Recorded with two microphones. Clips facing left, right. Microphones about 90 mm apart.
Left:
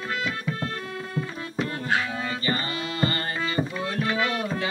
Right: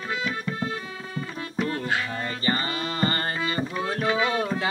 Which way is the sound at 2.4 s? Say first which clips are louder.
Right 1 dB; 35° right (ahead or behind).